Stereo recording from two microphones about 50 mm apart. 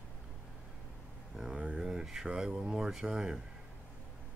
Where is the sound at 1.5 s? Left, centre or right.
Right.